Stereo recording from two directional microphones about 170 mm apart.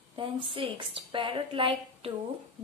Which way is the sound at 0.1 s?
30° right (ahead or behind).